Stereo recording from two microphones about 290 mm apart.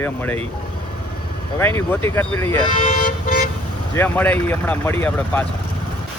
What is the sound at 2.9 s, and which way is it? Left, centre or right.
Toot, left.